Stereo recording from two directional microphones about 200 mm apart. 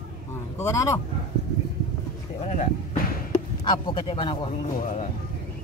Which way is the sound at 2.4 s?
35° left (ahead or behind).